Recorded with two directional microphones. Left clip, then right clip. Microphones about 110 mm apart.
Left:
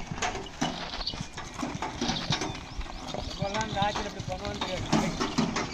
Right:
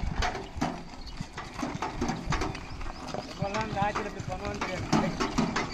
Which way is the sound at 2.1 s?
25° left (ahead or behind).